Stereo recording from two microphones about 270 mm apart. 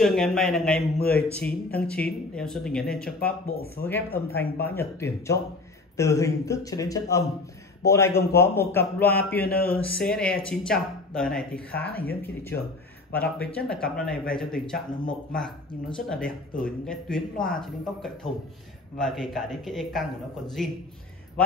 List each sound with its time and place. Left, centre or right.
0.0 s speech: centre
3.5 s speech: left
3.8 s a man's voice: centre
9.4 s speech: left
9.9 s speech: centre